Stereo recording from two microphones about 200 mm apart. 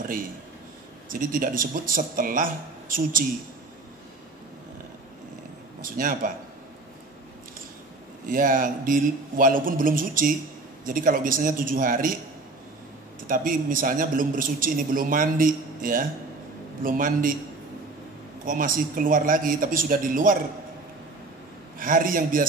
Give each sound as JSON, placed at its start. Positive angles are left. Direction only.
{"t": 1.1, "sound": "a man's voice", "side_deg": -45}
{"t": 5.8, "sound": "a man's voice", "side_deg": -45}
{"t": 8.3, "sound": "a man's voice", "side_deg": -45}
{"t": 13.3, "sound": "a man's voice", "side_deg": -45}
{"t": 18.4, "sound": "a man's voice", "side_deg": -40}
{"t": 21.7, "sound": "a man's voice", "side_deg": -45}